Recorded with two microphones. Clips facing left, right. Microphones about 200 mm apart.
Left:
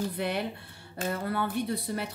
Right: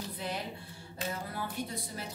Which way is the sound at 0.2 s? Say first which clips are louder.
Left 7 dB; 65° left (ahead or behind).